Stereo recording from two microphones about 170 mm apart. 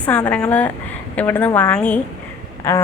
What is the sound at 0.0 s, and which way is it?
A woman's voice, 10° left (ahead or behind).